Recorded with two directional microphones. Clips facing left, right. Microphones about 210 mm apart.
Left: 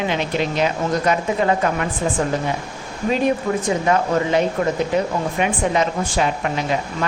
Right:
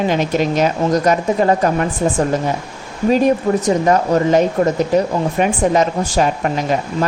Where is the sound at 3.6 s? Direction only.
40° right (ahead or behind).